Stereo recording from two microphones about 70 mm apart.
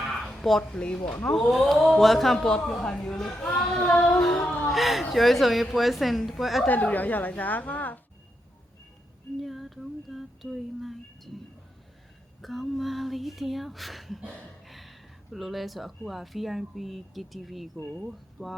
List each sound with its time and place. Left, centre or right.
0.0 s a sound: centre
0.8 s a woman's voice: centre
1.4 s a woman's voice: centre
6.7 s a woman's voice: left
9.4 s a sound: centre
12.4 s speech: centre